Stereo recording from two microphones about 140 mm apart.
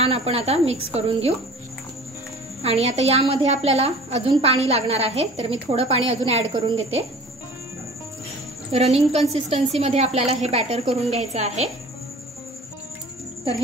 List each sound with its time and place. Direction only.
0.0 s a woman's voice: 45° right (ahead or behind)
2.6 s a woman's voice: 50° right (ahead or behind)
8.7 s a woman's voice: 50° right (ahead or behind)